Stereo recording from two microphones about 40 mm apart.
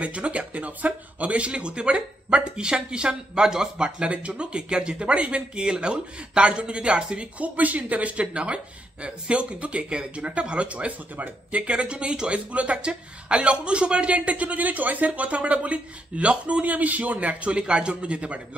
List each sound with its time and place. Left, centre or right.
0.0 s speech: right; by 3.9 s centre
4.0 s speech: right
7.3 s speech: right